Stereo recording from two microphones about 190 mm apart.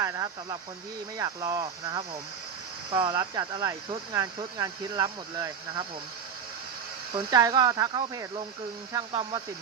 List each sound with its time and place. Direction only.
0.0 s speech: 20° right (ahead or behind)
7.1 s speech: 25° right (ahead or behind)